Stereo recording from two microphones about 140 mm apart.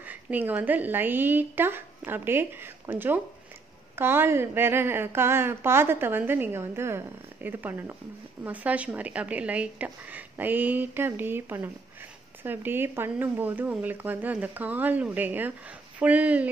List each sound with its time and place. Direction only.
0.0 s speech: 10° right (ahead or behind)